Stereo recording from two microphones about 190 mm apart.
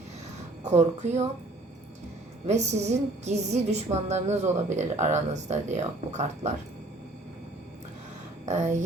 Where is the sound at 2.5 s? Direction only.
35° right (ahead or behind).